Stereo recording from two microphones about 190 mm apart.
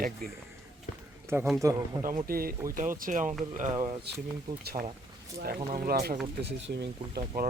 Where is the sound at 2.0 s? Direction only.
45° right (ahead or behind).